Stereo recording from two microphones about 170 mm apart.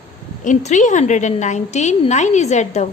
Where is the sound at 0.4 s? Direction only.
45° left (ahead or behind).